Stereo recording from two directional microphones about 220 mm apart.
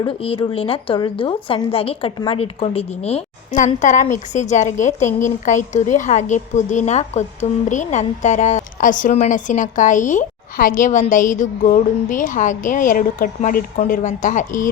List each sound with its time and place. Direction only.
0.0 s a woman's voice: 25° left (ahead or behind)